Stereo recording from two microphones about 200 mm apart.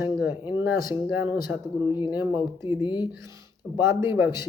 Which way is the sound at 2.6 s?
20° left (ahead or behind).